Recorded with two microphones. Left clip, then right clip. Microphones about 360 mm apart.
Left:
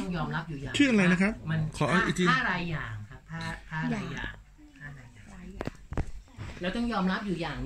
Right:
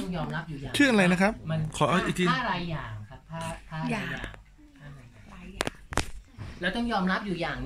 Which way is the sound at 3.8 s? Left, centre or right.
Right.